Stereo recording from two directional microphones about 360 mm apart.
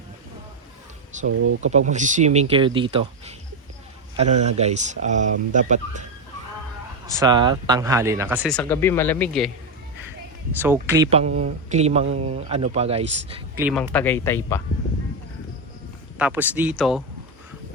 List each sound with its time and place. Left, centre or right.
1.3 s speech: right
1.6 s speech: centre
7.2 s speech: centre
10.8 s speech: centre
13.6 s speech: centre
16.1 s speech: centre